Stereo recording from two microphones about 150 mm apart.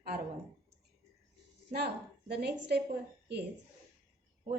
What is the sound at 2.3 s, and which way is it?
Speech, 90° right.